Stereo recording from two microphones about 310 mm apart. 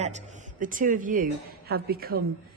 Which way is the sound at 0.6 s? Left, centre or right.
Right.